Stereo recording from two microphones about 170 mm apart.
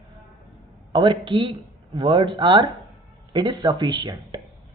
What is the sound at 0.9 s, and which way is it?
Speech, 30° right (ahead or behind).